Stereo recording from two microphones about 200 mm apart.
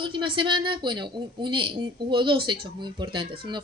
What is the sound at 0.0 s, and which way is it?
Speech, 25° right (ahead or behind).